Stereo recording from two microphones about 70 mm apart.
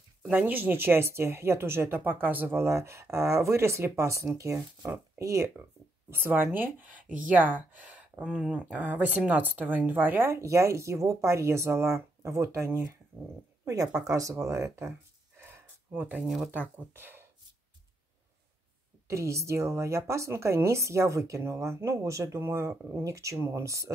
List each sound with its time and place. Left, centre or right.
0.3 s a woman's voice: right
4.8 s speech: right
5.2 s speech: right
6.0 s a woman's voice: right
19.0 s speech: right